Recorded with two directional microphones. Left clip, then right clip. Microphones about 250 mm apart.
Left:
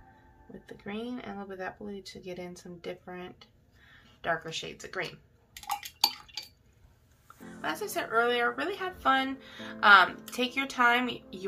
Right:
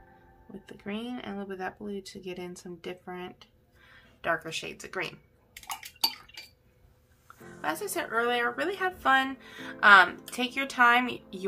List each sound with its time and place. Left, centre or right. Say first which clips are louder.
0.7 s a woman's voice: right 1 dB; centre
7.6 s a woman's voice: right 1 dB; centre